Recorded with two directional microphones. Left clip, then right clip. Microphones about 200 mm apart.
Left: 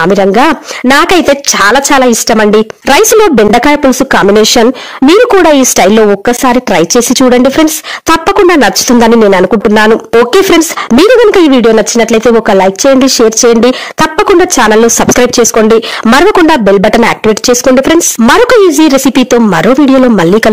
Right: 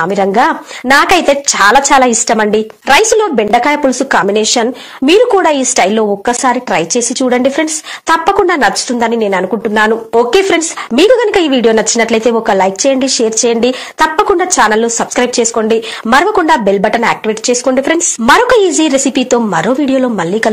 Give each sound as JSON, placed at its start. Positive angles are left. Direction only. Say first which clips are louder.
{"t": 0.0, "sound": "speech", "louder": "left 5 dB", "side_deg": 50}